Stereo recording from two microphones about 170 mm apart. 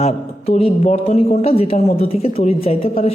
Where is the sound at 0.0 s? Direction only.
40° left (ahead or behind).